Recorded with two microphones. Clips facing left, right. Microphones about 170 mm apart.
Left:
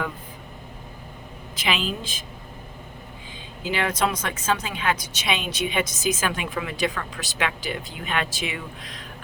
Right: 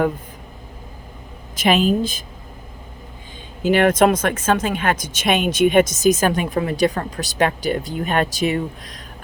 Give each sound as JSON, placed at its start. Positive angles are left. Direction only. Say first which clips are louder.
{"t": 1.5, "sound": "speech", "louder": "right 11 dB", "side_deg": -45}
{"t": 3.6, "sound": "speech", "louder": "right 10 dB", "side_deg": -50}